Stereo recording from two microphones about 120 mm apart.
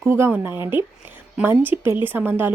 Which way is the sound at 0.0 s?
20° right (ahead or behind).